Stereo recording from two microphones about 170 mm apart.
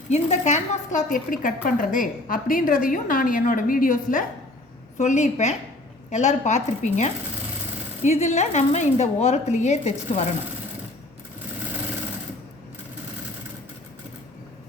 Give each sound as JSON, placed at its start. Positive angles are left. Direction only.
{"t": 0.1, "sound": "a woman's voice", "side_deg": 45}